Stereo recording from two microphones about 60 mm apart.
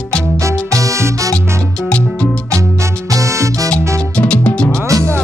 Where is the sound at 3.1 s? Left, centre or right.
Right.